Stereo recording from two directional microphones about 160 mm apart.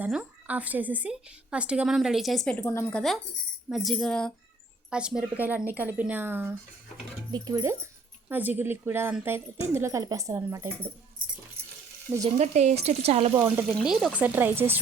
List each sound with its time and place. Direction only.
0.0 s a woman's voice: 5° right (ahead or behind)
2.6 s speech: 15° left (ahead or behind)
3.7 s music: centre (ahead or behind)
5.4 s a woman's voice: 10° right (ahead or behind)
11.2 s keys jangling: 60° right (ahead or behind)
11.6 s stir: 85° right
12.4 s speech: 45° right (ahead or behind)
13.3 s a woman's voice: 15° right (ahead or behind)
13.7 s a woman's voice: 5° right (ahead or behind)